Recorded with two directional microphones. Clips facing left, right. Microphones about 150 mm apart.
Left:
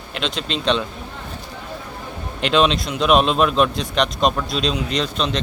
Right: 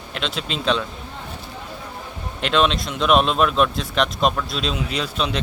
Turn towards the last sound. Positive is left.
turn(degrees=-5)  # may be behind; listen again after turning